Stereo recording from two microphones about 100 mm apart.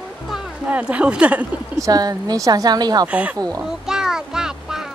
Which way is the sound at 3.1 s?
15° right (ahead or behind).